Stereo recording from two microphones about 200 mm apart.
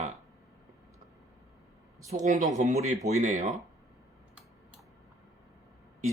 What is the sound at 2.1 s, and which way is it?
Speech, 35° right (ahead or behind).